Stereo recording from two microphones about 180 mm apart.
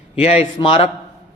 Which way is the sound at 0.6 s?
30° left (ahead or behind).